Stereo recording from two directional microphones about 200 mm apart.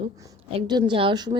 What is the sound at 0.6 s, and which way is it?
Speech, 20° right (ahead or behind).